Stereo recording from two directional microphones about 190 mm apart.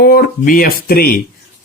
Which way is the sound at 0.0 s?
50° left (ahead or behind).